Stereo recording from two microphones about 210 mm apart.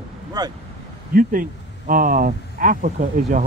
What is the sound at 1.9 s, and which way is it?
Speech, 40° right (ahead or behind).